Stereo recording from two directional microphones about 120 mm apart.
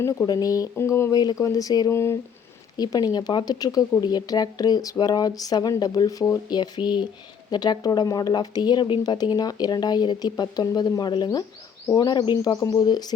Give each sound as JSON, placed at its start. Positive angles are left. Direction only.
{"t": 0.0, "sound": "speech", "side_deg": 25}